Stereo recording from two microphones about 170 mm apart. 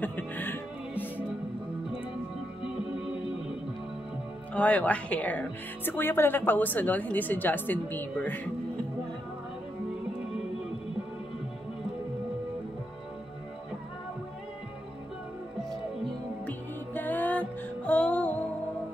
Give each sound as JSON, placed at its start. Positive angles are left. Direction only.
{"t": 0.0, "sound": "music", "side_deg": 10}
{"t": 2.6, "sound": "music", "side_deg": -5}
{"t": 4.6, "sound": "a woman's voice", "side_deg": 10}
{"t": 16.0, "sound": "music", "side_deg": 10}